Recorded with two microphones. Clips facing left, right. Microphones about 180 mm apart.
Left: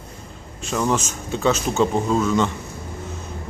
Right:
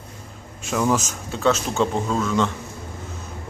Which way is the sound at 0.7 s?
5° right (ahead or behind).